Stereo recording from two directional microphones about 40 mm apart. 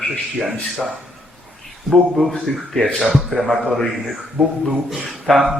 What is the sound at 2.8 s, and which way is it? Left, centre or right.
Speech, centre.